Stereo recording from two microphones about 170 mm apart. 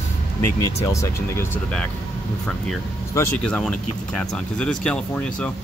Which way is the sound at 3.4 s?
5° left (ahead or behind).